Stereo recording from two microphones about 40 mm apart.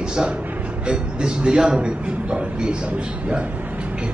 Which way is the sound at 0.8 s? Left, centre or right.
Right.